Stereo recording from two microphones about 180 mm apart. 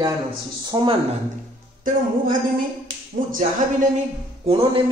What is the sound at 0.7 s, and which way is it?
Speech, 25° right (ahead or behind).